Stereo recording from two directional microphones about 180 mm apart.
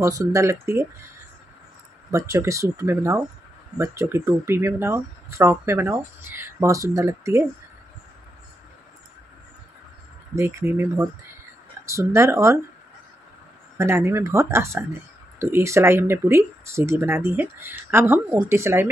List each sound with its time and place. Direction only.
0.0 s speech: 20° right (ahead or behind)
2.0 s speech: 15° right (ahead or behind)
10.3 s speech: 15° right (ahead or behind)
13.7 s speech: 15° right (ahead or behind)